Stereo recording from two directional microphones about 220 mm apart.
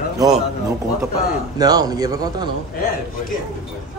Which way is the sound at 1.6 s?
15° right (ahead or behind).